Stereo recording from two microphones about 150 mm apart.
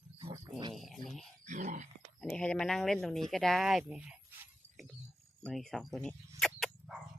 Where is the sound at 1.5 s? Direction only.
60° right (ahead or behind).